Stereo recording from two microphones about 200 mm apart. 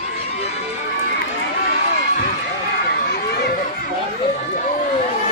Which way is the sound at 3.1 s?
50° left (ahead or behind).